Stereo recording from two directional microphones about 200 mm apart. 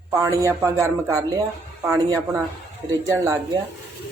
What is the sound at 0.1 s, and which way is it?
Speech, 15° right (ahead or behind).